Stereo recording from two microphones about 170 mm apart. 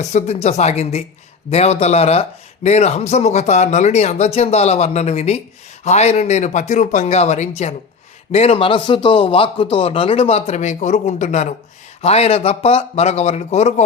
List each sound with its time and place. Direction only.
0.0 s a man's voice: 40° left (ahead or behind)